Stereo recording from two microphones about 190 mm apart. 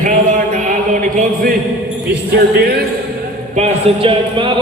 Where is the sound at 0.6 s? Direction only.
40° right (ahead or behind).